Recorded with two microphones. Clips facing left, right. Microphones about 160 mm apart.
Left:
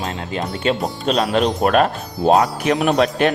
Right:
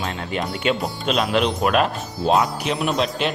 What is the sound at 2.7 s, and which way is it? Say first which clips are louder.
Speech: left 6 dB; 65° left (ahead or behind).